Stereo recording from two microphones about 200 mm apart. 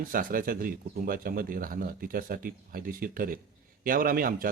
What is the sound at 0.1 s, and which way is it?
A man's voice, 45° right (ahead or behind).